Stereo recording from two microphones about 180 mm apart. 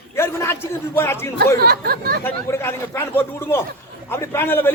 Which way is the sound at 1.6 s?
60° right (ahead or behind).